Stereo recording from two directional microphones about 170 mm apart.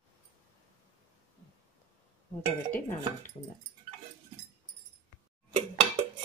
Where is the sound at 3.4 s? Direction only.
25° left (ahead or behind).